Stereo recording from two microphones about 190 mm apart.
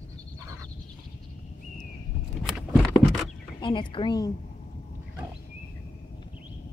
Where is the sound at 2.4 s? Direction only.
Centre (ahead or behind).